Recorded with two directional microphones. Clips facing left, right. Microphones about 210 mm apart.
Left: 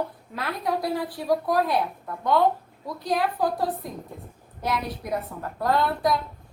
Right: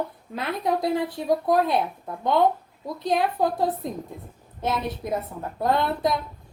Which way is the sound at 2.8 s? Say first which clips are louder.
Right 2 dB; 25° right (ahead or behind).